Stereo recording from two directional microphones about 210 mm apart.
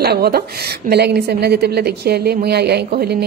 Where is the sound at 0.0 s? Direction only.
50° right (ahead or behind).